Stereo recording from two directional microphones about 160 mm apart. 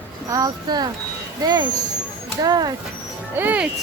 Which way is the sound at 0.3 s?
20° right (ahead or behind).